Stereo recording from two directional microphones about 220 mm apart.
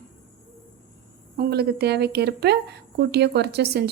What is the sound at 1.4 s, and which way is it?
A woman's voice, 45° right (ahead or behind).